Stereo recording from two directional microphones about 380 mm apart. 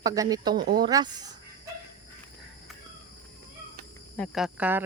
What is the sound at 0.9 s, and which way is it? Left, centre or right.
Speech, centre.